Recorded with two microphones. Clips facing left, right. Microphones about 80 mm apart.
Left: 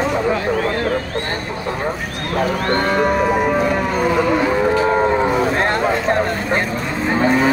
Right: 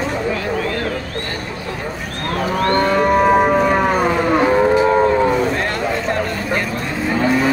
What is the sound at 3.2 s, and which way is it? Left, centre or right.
Moo, right.